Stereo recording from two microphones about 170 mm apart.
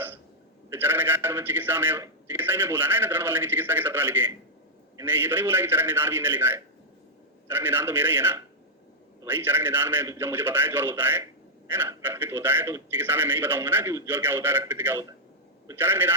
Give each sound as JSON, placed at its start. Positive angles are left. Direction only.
{"t": 0.7, "sound": "a man's voice", "side_deg": -10}